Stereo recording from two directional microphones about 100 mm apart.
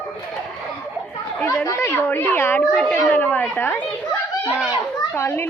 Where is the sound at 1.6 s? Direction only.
30° left (ahead or behind).